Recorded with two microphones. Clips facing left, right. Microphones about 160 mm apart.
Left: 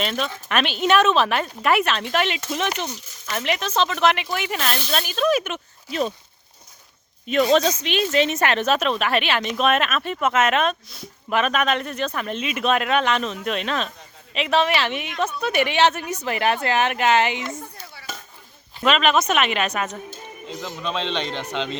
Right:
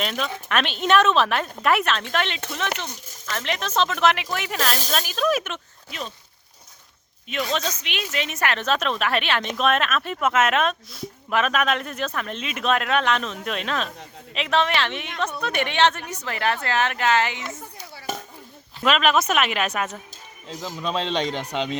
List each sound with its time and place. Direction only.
0.0 s speech: centre (ahead or behind)
5.9 s speech: 45° left (ahead or behind)
7.3 s a woman's voice: 40° left (ahead or behind); by 8.6 s 25° left (ahead or behind)
8.6 s a woman's voice: 5° left (ahead or behind)
17.4 s speech: 10° right (ahead or behind)